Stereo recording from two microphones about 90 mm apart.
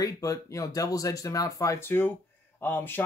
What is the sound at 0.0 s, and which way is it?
Speech, 40° left (ahead or behind).